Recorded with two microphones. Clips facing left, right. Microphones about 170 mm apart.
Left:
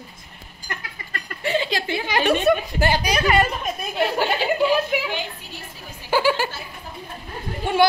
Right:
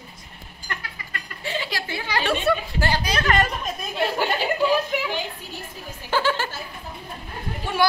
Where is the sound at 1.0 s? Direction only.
25° left (ahead or behind).